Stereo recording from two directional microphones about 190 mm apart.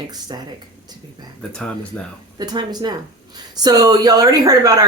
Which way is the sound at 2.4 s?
20° right (ahead or behind).